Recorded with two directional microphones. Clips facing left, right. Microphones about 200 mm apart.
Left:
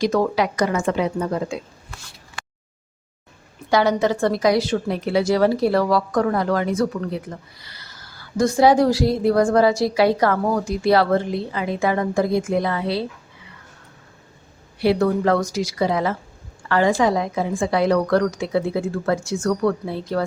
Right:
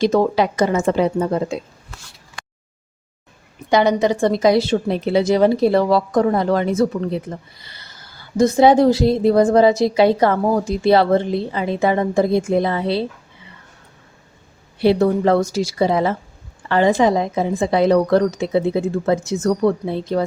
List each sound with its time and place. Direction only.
0.0 s a woman's voice: 25° right (ahead or behind)
3.7 s a woman's voice: 20° right (ahead or behind)
14.8 s a woman's voice: 25° right (ahead or behind)